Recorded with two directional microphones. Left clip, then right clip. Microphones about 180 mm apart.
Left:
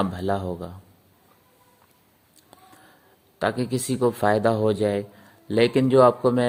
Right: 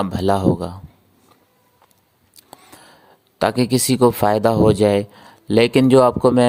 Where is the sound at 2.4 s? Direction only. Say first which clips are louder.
Right 7 dB; 40° right (ahead or behind).